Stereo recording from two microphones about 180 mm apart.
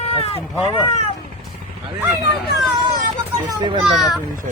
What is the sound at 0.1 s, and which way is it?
Speech, 35° left (ahead or behind).